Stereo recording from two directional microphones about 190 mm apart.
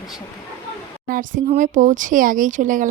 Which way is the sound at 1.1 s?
45° right (ahead or behind).